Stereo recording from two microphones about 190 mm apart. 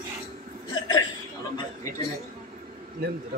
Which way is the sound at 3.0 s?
55° right (ahead or behind).